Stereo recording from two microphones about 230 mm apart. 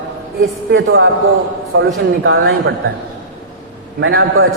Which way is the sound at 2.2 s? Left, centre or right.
Right.